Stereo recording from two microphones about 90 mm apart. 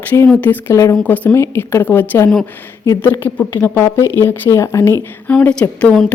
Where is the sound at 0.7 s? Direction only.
35° left (ahead or behind).